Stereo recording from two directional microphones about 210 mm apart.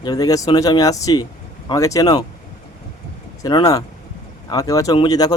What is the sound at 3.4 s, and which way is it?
Speech, 15° left (ahead or behind).